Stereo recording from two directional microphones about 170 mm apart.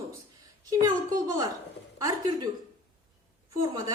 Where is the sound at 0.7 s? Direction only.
20° right (ahead or behind).